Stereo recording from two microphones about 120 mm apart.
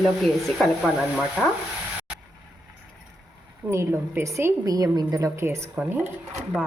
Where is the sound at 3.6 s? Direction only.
20° right (ahead or behind).